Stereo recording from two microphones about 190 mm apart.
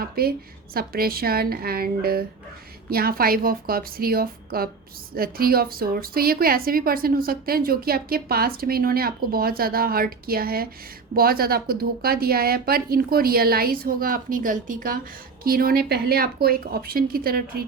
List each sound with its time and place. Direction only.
0.0 s a woman's voice: 50° right (ahead or behind)